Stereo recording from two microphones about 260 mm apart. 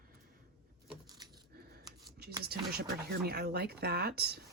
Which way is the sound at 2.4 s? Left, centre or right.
Right.